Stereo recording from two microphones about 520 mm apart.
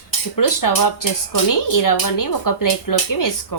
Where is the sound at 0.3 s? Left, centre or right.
Left.